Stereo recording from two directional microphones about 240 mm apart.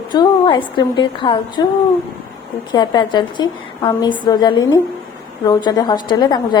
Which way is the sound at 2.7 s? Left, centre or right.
Centre.